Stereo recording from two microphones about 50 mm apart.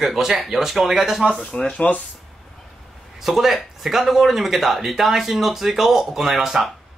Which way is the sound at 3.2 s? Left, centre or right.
Centre.